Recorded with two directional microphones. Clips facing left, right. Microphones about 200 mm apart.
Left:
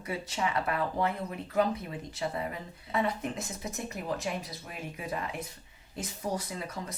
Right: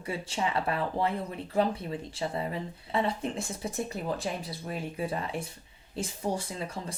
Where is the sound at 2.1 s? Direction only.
30° right (ahead or behind).